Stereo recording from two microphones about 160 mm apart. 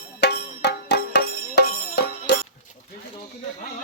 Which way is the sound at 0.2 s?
90° left.